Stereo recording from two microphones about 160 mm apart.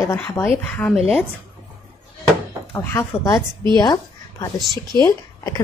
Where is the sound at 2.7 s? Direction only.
15° left (ahead or behind).